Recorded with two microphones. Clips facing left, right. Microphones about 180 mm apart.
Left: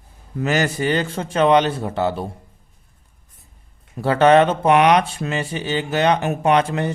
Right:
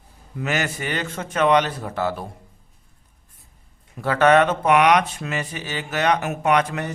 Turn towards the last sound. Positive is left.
turn(degrees=30)  # may be behind; listen again after turning